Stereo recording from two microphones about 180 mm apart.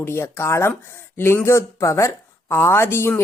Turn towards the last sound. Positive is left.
turn(degrees=15)  # may be behind; listen again after turning